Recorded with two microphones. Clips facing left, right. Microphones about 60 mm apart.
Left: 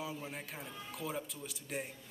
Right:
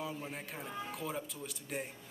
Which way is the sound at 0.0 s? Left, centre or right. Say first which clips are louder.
Right 1 dB; centre.